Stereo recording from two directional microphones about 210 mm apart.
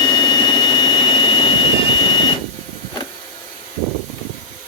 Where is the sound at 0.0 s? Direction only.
20° left (ahead or behind).